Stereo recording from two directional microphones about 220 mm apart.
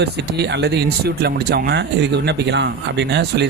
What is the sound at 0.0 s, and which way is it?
Speech, 50° right (ahead or behind).